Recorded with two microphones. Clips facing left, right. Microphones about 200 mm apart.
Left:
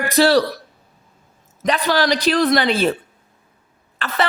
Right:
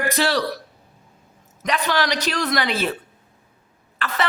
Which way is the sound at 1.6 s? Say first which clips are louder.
Left 4 dB; 30° left (ahead or behind).